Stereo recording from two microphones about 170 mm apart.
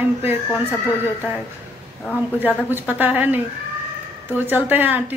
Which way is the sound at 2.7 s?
10° right (ahead or behind).